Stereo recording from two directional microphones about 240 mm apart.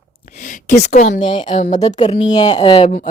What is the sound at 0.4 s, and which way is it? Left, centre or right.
Speech, left.